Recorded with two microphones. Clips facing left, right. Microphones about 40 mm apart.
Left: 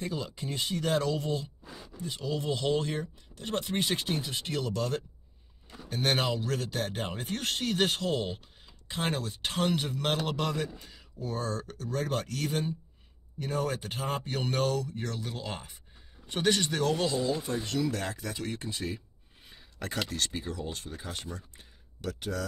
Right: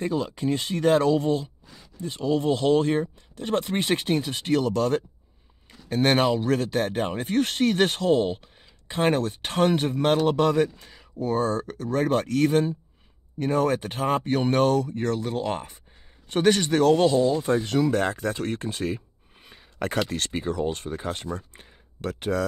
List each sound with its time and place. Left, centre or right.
0.2 s speech: right
1.0 s a man's voice: right
1.6 s a sound: centre
2.2 s speech: right
4.0 s a man's voice: right
4.5 s a man's voice: right
16.3 s speech: right